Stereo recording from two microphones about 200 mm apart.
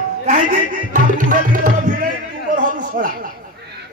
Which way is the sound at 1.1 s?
40° right (ahead or behind).